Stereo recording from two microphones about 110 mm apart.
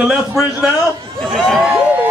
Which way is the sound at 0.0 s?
5° right (ahead or behind).